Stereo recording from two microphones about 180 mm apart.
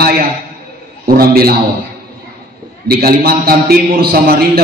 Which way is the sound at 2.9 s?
55° right (ahead or behind).